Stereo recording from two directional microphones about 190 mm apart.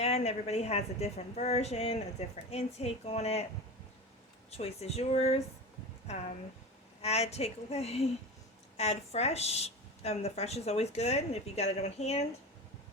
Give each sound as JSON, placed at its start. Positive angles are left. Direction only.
{"t": 0.0, "sound": "a woman's voice", "side_deg": 35}
{"t": 4.5, "sound": "a woman's voice", "side_deg": 35}